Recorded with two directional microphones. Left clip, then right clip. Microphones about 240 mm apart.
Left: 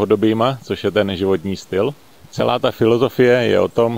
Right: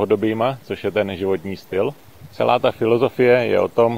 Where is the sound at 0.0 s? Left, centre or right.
Left.